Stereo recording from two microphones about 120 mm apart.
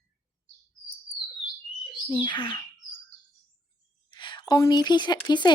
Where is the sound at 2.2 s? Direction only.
45° left (ahead or behind).